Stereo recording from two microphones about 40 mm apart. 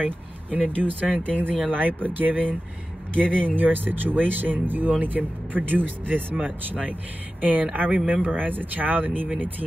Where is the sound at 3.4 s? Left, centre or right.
Right.